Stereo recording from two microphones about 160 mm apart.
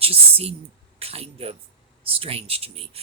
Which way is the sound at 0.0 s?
35° right (ahead or behind).